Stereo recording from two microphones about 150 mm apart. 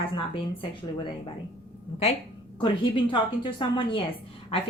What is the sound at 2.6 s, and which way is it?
A woman's voice, 35° left (ahead or behind).